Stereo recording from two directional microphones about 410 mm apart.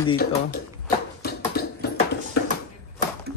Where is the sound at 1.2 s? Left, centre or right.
Left.